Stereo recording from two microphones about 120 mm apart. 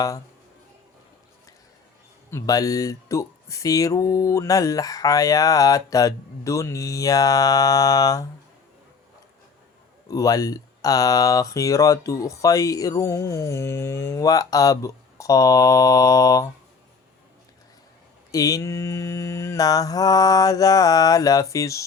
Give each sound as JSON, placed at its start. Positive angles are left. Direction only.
{"t": 2.3, "sound": "speech", "side_deg": 30}
{"t": 10.1, "sound": "speech", "side_deg": 30}
{"t": 18.3, "sound": "speech", "side_deg": 30}